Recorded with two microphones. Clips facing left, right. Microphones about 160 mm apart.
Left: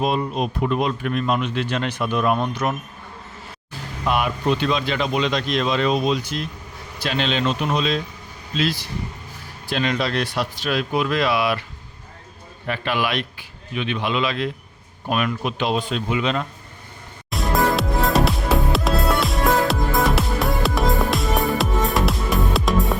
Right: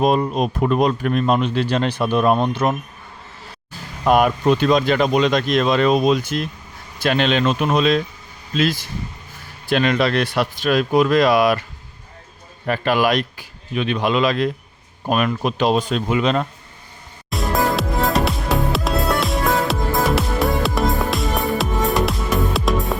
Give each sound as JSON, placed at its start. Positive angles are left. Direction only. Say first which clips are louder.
{"t": 0.0, "sound": "speech", "louder": "right 4 dB", "side_deg": -45}
{"t": 4.0, "sound": "speech", "louder": "right 6 dB", "side_deg": -45}
{"t": 9.6, "sound": "speech", "louder": "right 5 dB", "side_deg": -60}
{"t": 12.6, "sound": "speech", "louder": "right 6 dB", "side_deg": -45}
{"t": 17.2, "sound": "music", "louder": "even", "side_deg": 0}